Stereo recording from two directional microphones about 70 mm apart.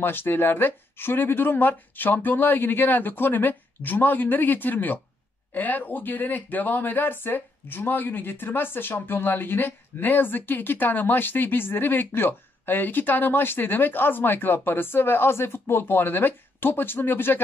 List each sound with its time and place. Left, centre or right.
0.0 s speech: left